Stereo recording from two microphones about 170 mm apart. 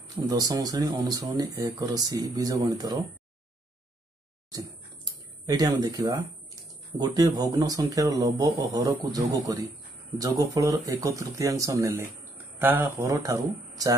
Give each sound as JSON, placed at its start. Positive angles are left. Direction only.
{"t": 0.1, "sound": "speech", "side_deg": -20}
{"t": 5.5, "sound": "speech", "side_deg": -25}